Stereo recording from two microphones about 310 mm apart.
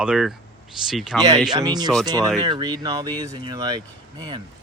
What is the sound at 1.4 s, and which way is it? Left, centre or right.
Speech, centre.